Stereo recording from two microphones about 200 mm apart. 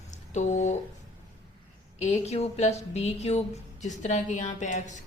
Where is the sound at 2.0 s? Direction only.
35° left (ahead or behind).